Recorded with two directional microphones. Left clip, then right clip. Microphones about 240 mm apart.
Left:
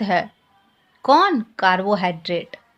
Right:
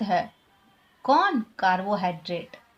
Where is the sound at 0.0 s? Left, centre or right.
Left.